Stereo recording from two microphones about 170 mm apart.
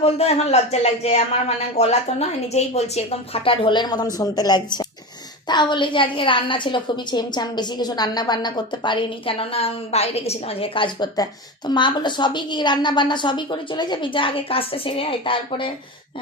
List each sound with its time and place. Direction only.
0.0 s a woman's voice: 35° left (ahead or behind)